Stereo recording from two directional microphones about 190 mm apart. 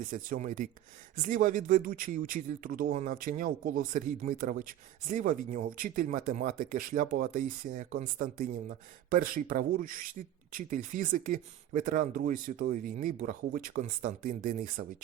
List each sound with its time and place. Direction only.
0.0 s speech: 45° right (ahead or behind)